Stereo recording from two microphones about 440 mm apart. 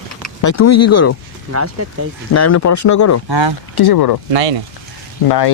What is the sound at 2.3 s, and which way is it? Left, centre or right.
Speech, left.